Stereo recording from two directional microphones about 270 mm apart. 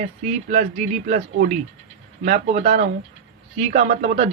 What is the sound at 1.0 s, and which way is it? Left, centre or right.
A man's voice, right.